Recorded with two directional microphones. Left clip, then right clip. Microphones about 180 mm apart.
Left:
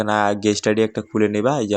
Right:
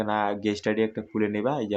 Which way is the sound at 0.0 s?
35° left (ahead or behind).